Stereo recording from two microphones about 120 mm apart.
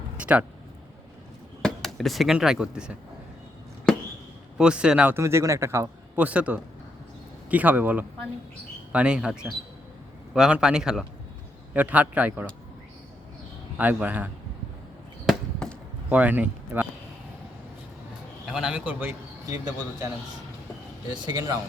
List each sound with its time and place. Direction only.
0.2 s a man's voice: 10° right (ahead or behind)
1.6 s speech: centre (ahead or behind)
3.9 s basketball bounce: 5° left (ahead or behind)
4.5 s a man's voice: 10° right (ahead or behind)
5.1 s speech: 25° right (ahead or behind)
6.2 s a man's voice: 10° right (ahead or behind)
13.7 s a man's voice: 15° right (ahead or behind)
15.3 s chop: 5° left (ahead or behind)
16.0 s speech: 15° right (ahead or behind)
18.4 s a man's voice: 5° right (ahead or behind)
21.3 s speech: 25° right (ahead or behind)